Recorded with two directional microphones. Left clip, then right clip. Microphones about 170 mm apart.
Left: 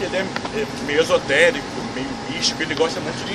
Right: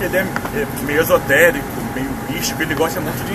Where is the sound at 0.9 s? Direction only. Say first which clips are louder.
Right 3 dB; 20° left (ahead or behind).